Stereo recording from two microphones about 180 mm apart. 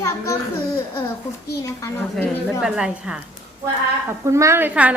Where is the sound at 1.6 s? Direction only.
15° left (ahead or behind).